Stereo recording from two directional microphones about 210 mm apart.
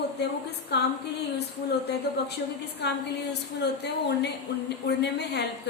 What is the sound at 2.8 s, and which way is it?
A woman's voice, 55° left (ahead or behind).